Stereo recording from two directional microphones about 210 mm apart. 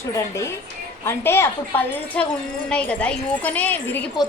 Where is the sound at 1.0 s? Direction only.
10° left (ahead or behind).